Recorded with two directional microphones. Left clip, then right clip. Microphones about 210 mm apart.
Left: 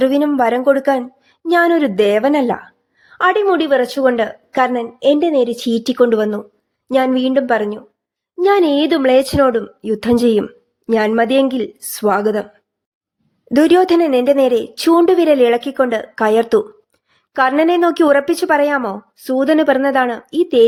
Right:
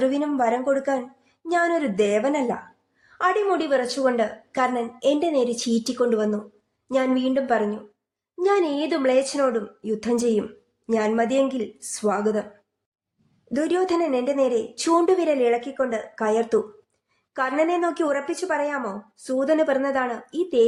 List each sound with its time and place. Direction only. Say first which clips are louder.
0.0 s speech: left 8 dB; 35° left (ahead or behind)
13.5 s speech: left 11 dB; 45° left (ahead or behind)